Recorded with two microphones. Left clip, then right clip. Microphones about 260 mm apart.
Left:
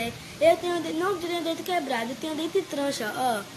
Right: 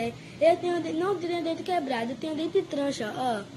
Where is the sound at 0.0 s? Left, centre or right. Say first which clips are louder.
Left 1 dB; centre.